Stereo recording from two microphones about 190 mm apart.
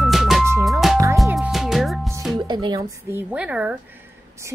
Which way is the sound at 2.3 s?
25° right (ahead or behind).